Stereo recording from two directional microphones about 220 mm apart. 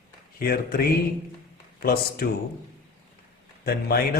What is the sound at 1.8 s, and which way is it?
Speech, 45° left (ahead or behind).